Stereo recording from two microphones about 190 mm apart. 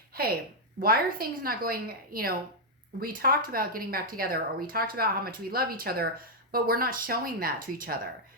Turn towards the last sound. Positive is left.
turn(degrees=-50)  # may be behind; listen again after turning